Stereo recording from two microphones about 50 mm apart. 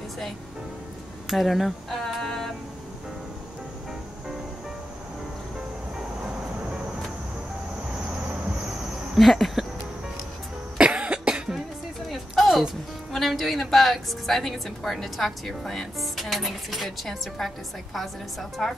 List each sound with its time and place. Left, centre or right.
1.3 s a sound: centre
9.1 s speech: centre
10.8 s cough: right
12.1 s music: centre
13.1 s a woman's voice: centre